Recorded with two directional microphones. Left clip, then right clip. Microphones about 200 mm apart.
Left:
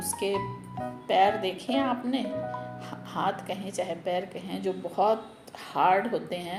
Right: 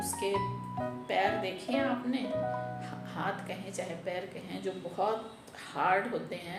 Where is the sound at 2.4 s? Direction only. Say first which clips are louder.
Even; centre (ahead or behind).